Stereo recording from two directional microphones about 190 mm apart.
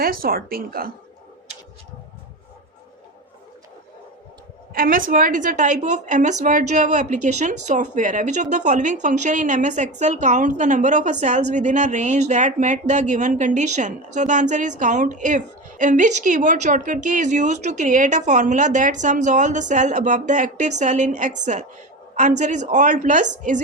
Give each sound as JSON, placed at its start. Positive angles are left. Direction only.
{"t": 0.0, "sound": "speech", "side_deg": -50}
{"t": 4.7, "sound": "a woman's voice", "side_deg": -45}